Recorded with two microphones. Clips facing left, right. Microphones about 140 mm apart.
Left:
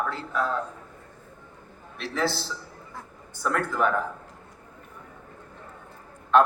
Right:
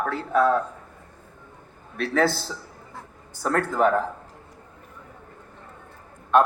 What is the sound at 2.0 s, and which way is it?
A man's voice, 50° right (ahead or behind).